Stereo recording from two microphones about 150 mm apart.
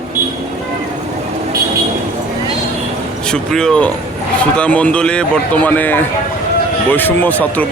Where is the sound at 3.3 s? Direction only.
5° left (ahead or behind).